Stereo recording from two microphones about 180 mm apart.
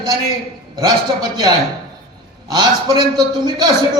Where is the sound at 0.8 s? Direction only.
25° right (ahead or behind).